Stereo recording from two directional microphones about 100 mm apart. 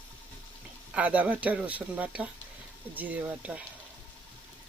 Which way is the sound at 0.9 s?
15° right (ahead or behind).